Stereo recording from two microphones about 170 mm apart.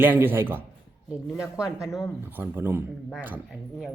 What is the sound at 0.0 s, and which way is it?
Speech, 10° right (ahead or behind).